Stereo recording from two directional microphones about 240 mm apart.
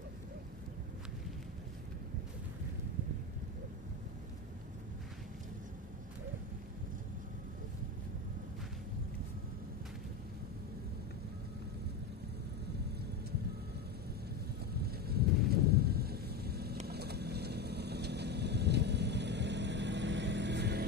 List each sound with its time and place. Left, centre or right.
14.6 s vehicle: right
15.5 s a sound: right
16.8 s vehicle: right